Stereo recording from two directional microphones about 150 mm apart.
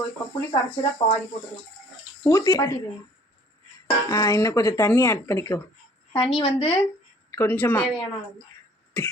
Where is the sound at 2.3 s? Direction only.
20° left (ahead or behind).